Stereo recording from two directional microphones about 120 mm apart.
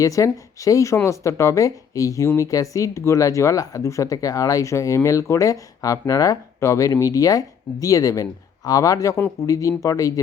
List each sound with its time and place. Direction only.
0.0 s speech: 30° left (ahead or behind)